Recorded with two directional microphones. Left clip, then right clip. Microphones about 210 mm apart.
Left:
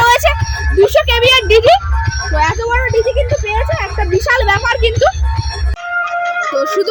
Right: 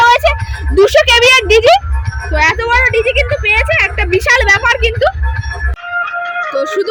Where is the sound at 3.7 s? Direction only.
10° right (ahead or behind).